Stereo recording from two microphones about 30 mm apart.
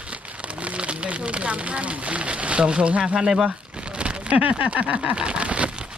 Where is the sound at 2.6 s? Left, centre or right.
Right.